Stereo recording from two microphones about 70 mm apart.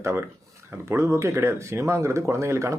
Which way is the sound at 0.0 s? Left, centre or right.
Right.